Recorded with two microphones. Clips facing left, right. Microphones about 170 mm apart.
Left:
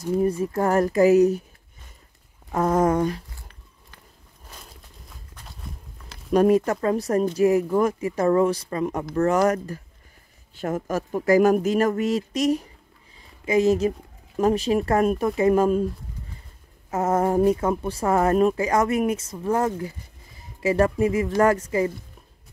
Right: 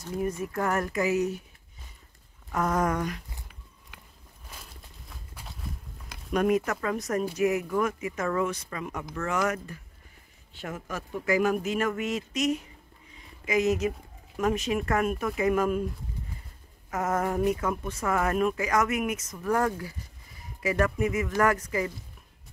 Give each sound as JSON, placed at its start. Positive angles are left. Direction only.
{"t": 0.2, "sound": "speech", "side_deg": 35}
{"t": 2.5, "sound": "speech", "side_deg": 30}
{"t": 6.3, "sound": "speech", "side_deg": 30}
{"t": 16.9, "sound": "speech", "side_deg": 30}